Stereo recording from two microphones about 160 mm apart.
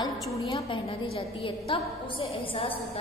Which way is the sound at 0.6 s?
35° left (ahead or behind).